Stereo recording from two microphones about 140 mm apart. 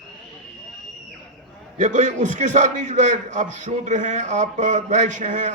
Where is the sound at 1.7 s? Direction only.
60° right (ahead or behind).